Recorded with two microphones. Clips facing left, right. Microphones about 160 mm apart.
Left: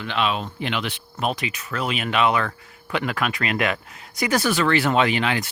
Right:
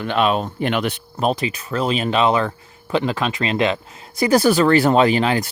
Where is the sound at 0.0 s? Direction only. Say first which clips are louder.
Right 6 dB; 45° right (ahead or behind).